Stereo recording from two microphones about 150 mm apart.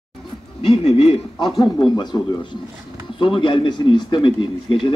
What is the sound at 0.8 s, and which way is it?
Speech, 45° left (ahead or behind).